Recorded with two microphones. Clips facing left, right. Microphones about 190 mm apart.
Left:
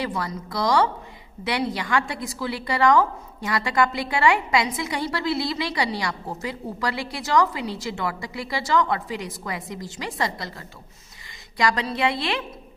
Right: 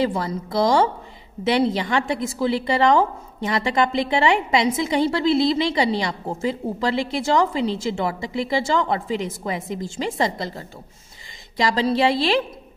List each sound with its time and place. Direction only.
0.0 s a woman's voice: 25° right (ahead or behind)